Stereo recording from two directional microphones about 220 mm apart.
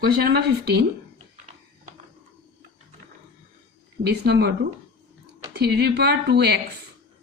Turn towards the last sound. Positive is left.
turn(degrees=-50)  # may be behind; listen again after turning